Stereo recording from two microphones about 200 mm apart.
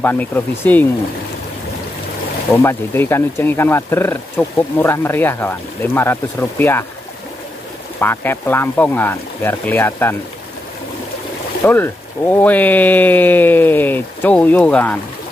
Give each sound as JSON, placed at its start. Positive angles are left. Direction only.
{"t": 0.0, "sound": "speech", "side_deg": 10}
{"t": 2.5, "sound": "speech", "side_deg": 15}
{"t": 8.0, "sound": "speech", "side_deg": 10}
{"t": 11.6, "sound": "speech", "side_deg": 10}